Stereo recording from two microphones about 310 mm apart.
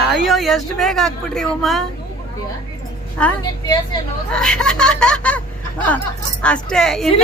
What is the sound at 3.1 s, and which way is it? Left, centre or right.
A woman's voice, centre.